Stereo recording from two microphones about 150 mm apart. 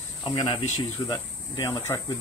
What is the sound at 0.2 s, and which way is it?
Speech, 30° left (ahead or behind).